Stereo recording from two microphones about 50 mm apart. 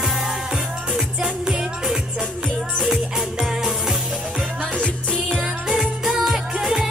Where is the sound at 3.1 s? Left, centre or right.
Centre.